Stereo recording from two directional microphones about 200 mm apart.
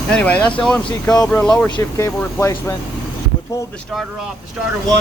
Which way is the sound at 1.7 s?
20° left (ahead or behind).